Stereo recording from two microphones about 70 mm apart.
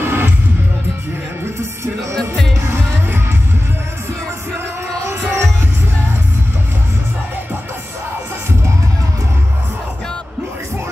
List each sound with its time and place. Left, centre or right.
0.0 s music: right
2.1 s music: centre
5.1 s music: right